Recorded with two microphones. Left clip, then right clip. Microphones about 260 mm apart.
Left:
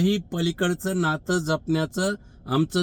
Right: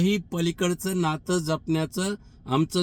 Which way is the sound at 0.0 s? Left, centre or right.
Left.